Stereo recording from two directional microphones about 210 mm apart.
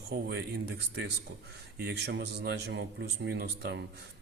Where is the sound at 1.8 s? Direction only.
50° right (ahead or behind).